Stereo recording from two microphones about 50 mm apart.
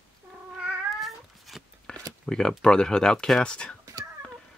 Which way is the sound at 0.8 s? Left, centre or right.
Centre.